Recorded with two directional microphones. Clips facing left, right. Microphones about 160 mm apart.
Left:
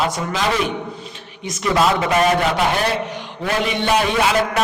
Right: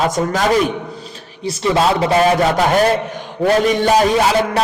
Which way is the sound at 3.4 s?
45° right (ahead or behind).